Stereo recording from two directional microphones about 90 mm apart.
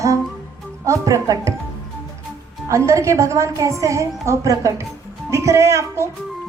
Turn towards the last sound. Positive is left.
turn(degrees=-35)  # may be behind; listen again after turning